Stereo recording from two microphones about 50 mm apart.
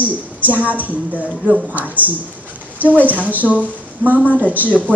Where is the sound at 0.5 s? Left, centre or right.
Right.